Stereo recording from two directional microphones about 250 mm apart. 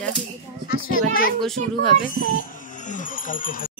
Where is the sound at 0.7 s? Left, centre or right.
Left.